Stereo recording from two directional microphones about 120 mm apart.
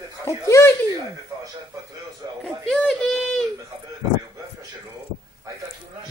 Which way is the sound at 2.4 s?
5° left (ahead or behind).